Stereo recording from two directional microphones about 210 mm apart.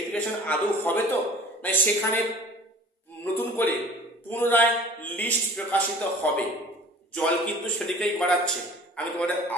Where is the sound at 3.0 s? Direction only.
10° left (ahead or behind).